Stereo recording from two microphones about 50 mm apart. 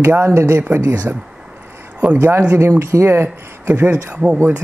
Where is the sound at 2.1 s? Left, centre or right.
Right.